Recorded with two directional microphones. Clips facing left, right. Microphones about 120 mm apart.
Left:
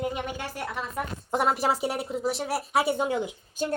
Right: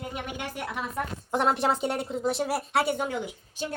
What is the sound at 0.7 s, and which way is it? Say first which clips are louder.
Speech: even; 5° right (ahead or behind).